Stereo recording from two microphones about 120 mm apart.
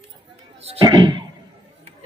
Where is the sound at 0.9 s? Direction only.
40° right (ahead or behind).